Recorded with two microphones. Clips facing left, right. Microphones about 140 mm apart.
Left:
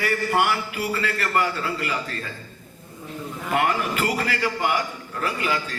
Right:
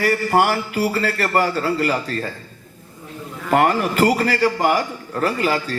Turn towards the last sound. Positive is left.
turn(degrees=-40)  # may be behind; listen again after turning